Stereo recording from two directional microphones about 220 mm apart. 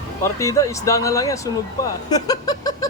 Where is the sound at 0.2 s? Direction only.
15° left (ahead or behind).